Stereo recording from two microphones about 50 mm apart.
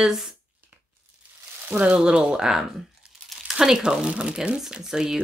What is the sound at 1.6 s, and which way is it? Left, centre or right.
Speech, right.